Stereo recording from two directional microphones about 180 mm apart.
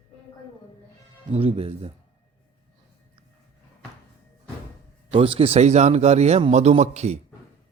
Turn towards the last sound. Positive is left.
turn(degrees=-40)  # may be behind; listen again after turning